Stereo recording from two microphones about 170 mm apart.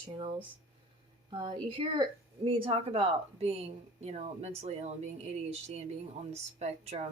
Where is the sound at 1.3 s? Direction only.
30° right (ahead or behind).